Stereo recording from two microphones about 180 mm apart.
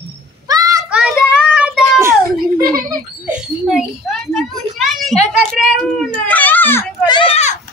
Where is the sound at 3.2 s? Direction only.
5° right (ahead or behind).